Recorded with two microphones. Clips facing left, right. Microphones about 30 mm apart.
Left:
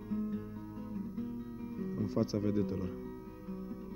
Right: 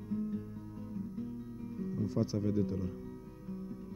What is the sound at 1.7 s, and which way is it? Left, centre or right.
Speech, centre.